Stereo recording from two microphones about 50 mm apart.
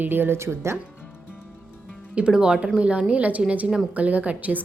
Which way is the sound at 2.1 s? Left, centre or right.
Centre.